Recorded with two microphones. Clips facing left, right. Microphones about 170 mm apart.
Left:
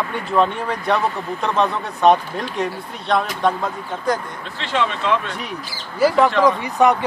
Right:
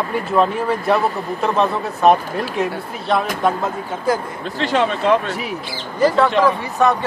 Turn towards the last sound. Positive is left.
turn(degrees=15)  # may be behind; listen again after turning